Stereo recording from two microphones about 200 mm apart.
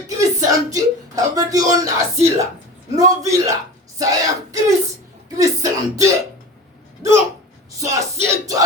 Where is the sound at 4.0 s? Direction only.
15° right (ahead or behind).